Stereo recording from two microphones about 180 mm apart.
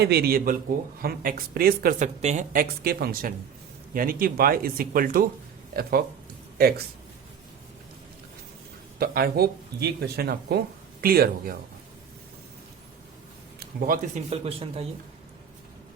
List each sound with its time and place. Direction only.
0.0 s speech: 65° right (ahead or behind)
2.2 s speech: 45° right (ahead or behind); by 6.8 s 60° right (ahead or behind)
9.0 s speech: 60° right (ahead or behind)
13.6 s a man's voice: 55° right (ahead or behind)
14.3 s speech: 35° right (ahead or behind)